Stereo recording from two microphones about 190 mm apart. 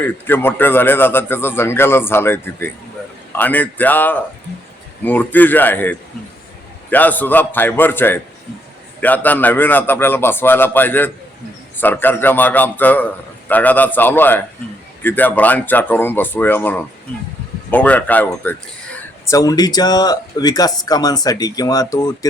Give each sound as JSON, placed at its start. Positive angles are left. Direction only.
{"t": 0.0, "sound": "a man's voice", "side_deg": 10}